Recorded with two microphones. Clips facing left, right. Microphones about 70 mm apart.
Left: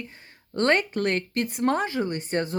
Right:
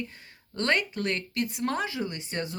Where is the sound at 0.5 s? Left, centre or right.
Left.